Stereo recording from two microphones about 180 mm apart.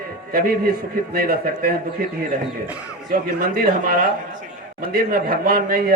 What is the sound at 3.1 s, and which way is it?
Speech, 55° right (ahead or behind).